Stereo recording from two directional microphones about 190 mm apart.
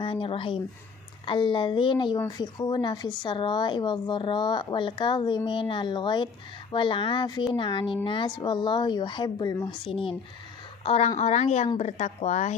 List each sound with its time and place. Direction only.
0.0 s speech: 30° left (ahead or behind)